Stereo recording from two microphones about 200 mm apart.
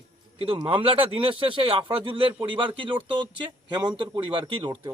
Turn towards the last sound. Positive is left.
turn(degrees=-25)  # may be behind; listen again after turning